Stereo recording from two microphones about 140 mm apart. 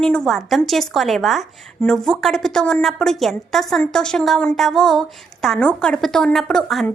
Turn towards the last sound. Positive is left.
turn(degrees=0)  # may be behind; listen again after turning